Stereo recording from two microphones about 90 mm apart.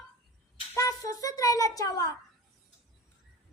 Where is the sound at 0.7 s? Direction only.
40° left (ahead or behind).